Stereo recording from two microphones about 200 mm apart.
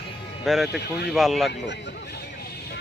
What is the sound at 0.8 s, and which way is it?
Speech, 55° left (ahead or behind).